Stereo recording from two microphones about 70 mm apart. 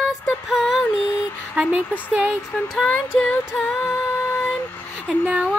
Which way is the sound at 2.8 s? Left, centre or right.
Centre.